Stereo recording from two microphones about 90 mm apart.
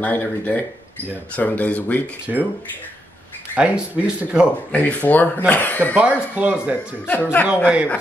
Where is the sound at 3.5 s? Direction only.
15° right (ahead or behind).